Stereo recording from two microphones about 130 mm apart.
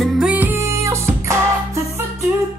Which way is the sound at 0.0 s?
10° right (ahead or behind).